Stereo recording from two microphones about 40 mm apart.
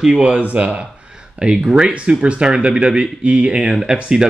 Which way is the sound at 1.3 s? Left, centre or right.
Centre.